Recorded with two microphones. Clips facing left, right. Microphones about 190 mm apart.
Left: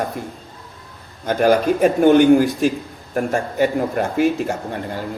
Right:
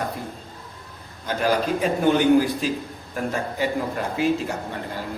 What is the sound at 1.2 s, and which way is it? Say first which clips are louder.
A man's voice: left 7 dB; 50° left (ahead or behind).